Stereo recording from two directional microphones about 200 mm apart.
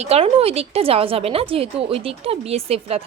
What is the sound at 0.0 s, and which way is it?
A woman's voice, 30° right (ahead or behind).